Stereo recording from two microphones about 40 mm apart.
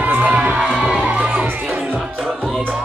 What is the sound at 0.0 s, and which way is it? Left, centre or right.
Crowd, right.